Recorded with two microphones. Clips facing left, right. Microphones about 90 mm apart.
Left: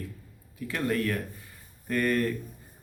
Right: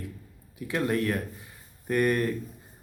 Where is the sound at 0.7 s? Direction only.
20° right (ahead or behind).